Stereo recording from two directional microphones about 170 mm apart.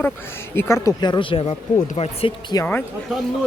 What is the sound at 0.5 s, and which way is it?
Speech, 15° left (ahead or behind).